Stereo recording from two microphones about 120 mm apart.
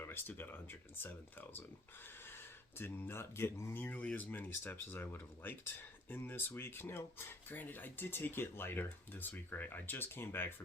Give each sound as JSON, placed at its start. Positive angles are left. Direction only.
{"t": 0.0, "sound": "speech", "side_deg": 20}